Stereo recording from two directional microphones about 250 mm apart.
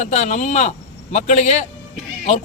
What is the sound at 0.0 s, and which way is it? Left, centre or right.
A man's voice, left.